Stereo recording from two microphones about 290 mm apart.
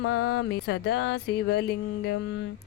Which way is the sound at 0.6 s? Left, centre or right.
Left.